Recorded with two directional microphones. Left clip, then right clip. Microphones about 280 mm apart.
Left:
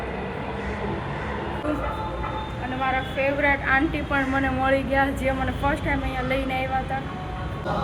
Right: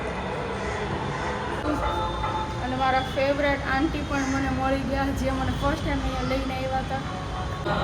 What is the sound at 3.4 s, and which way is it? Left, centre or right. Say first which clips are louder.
Speech: left 3 dB; centre.